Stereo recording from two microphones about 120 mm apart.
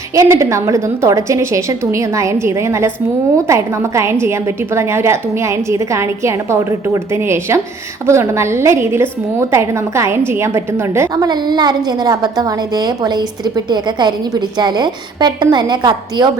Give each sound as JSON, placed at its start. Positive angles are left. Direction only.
{"t": 0.1, "sound": "a woman's voice", "side_deg": -25}
{"t": 11.1, "sound": "a woman's voice", "side_deg": -35}